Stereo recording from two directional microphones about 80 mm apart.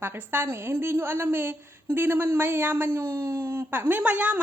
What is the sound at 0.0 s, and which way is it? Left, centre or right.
A woman's voice, right.